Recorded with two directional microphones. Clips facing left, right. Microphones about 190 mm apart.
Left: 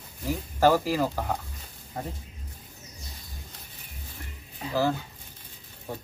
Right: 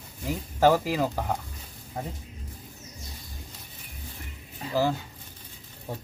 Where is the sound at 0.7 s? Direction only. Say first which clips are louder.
Even; 15° right (ahead or behind).